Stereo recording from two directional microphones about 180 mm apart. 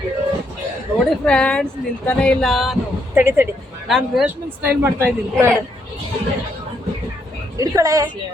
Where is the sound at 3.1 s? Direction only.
10° right (ahead or behind).